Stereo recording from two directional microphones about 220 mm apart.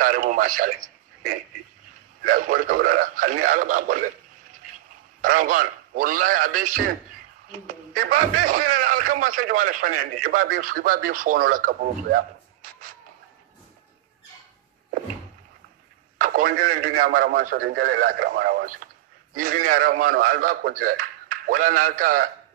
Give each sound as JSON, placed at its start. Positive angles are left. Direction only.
{"t": 0.0, "sound": "a man's voice", "side_deg": -40}
{"t": 5.2, "sound": "speech", "side_deg": -40}
{"t": 16.2, "sound": "speech", "side_deg": -40}